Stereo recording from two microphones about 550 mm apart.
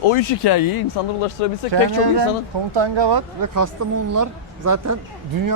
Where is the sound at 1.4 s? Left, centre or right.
Left.